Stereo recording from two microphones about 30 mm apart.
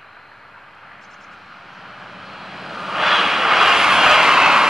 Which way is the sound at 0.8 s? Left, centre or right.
Centre.